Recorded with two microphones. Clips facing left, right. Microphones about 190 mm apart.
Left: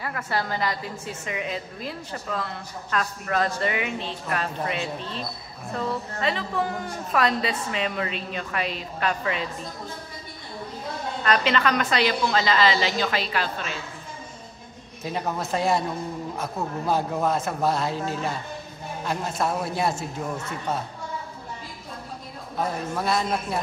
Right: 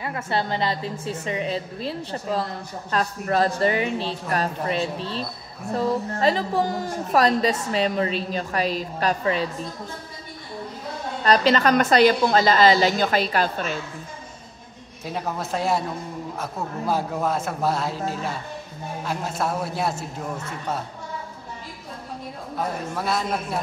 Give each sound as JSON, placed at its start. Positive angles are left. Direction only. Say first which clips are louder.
{"t": 0.0, "sound": "a woman's voice", "louder": "right 2 dB", "side_deg": -25}
{"t": 11.2, "sound": "a woman's voice", "louder": "right 4 dB", "side_deg": -35}
{"t": 15.0, "sound": "a man's voice", "louder": "even", "side_deg": 0}
{"t": 22.9, "sound": "a man's voice", "louder": "left 1 dB", "side_deg": 0}